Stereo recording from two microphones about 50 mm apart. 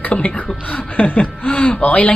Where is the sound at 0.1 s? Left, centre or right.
Left.